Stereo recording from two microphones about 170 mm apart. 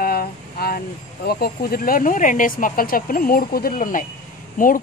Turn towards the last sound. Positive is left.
turn(degrees=55)  # may be behind; listen again after turning